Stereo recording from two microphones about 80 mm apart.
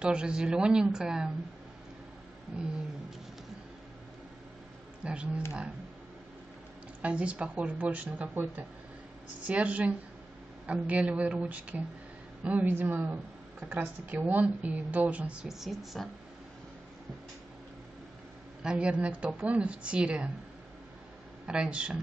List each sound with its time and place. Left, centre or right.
0.0 s a woman's voice: centre
5.0 s a woman's voice: centre
7.0 s a woman's voice: centre
18.6 s a woman's voice: centre
21.5 s a woman's voice: centre